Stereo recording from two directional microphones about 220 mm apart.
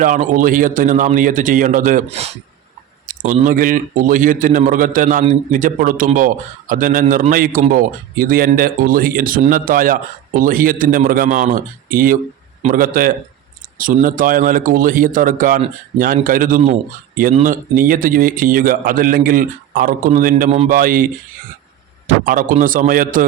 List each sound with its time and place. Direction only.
0.0 s speech: 35° right (ahead or behind)